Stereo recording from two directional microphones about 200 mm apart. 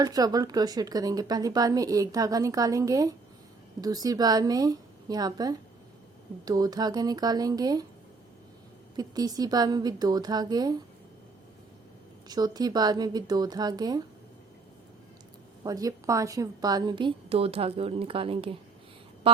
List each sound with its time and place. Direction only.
0.0 s a woman's voice: 20° right (ahead or behind)
9.0 s a woman's voice: 20° right (ahead or behind)
12.3 s a woman's voice: 20° right (ahead or behind)
15.6 s a woman's voice: 20° right (ahead or behind)